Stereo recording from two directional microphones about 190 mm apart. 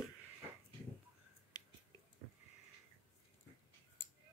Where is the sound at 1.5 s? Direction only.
20° left (ahead or behind).